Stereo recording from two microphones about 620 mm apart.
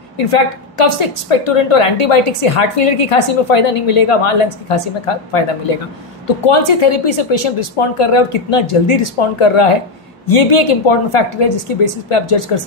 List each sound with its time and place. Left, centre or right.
0.2 s a woman's voice: left